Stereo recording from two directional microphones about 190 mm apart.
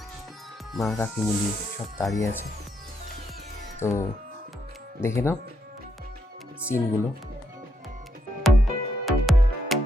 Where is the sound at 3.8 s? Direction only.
15° left (ahead or behind).